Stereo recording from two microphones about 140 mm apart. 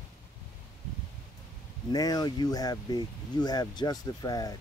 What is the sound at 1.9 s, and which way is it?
Speech, 30° left (ahead or behind).